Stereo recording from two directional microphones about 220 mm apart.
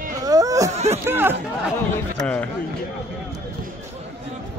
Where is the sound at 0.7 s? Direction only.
30° right (ahead or behind).